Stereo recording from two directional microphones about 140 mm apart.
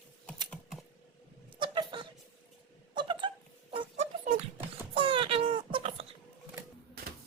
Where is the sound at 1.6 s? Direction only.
35° right (ahead or behind).